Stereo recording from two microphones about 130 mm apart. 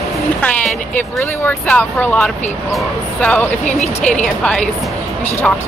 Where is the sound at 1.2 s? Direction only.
15° left (ahead or behind).